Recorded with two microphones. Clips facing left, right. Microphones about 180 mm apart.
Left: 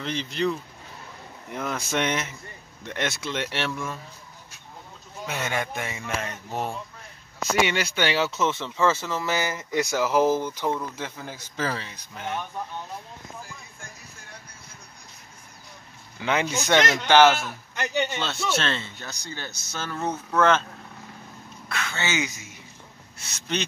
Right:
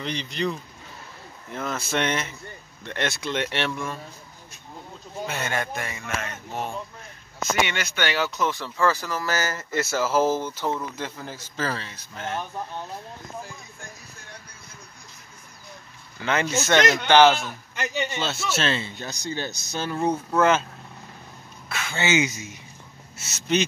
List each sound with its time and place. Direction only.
0.0 s speech: 5° left (ahead or behind)
5.2 s speech: 10° left (ahead or behind)
6.0 s a sound: 35° left (ahead or behind)
7.6 s speech: 35° left (ahead or behind); by 12.4 s 15° left (ahead or behind)
16.2 s speech: 10° left (ahead or behind); by 20.6 s 10° right (ahead or behind)
21.6 s speech: 5° right (ahead or behind)
23.1 s speech: 5° right (ahead or behind)